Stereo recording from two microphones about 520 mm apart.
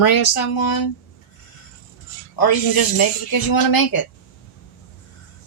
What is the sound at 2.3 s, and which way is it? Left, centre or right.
Speech, left.